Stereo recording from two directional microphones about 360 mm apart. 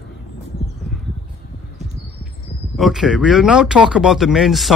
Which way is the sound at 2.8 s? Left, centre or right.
Centre.